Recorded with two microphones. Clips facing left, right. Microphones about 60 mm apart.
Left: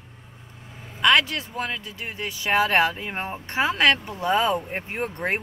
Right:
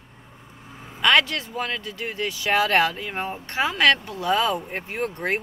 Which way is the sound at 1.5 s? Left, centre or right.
Centre.